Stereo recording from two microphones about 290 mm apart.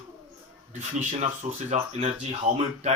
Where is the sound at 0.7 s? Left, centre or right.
Right.